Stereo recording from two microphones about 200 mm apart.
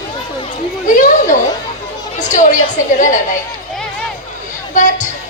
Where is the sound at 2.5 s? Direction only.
40° left (ahead or behind).